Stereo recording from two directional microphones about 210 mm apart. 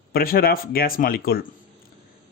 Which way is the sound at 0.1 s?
45° left (ahead or behind).